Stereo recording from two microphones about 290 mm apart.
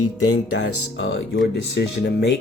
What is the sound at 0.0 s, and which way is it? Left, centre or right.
Speech, left.